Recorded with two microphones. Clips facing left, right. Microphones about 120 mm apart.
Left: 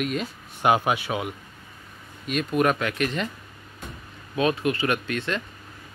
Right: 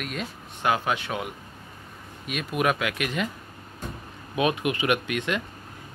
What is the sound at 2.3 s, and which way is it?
Speech, 5° right (ahead or behind).